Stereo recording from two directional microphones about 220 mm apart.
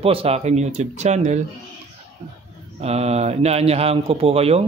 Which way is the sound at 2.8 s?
30° right (ahead or behind).